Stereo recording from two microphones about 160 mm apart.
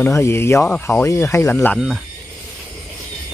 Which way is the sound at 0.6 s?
5° left (ahead or behind).